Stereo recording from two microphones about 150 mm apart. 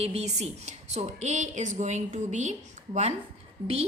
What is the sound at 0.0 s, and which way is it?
A woman's voice, 45° right (ahead or behind).